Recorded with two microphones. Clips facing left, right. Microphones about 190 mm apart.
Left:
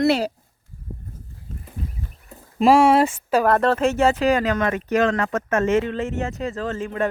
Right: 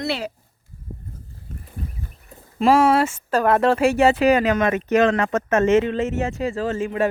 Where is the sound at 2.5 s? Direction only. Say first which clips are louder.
Left 1 dB; 15° left (ahead or behind).